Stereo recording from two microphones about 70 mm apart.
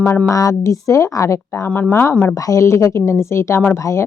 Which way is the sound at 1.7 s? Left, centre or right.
Left.